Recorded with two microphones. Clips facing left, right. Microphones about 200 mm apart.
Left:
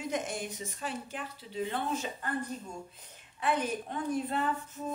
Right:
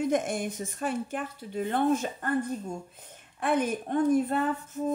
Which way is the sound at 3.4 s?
50° right (ahead or behind).